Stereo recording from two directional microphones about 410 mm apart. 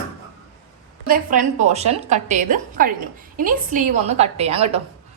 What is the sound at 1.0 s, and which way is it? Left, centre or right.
A woman's voice, centre.